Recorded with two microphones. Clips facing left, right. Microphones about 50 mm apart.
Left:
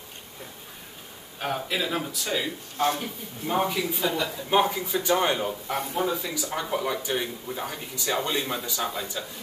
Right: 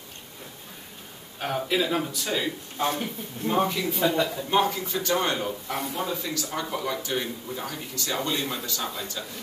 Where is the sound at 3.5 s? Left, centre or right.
Centre.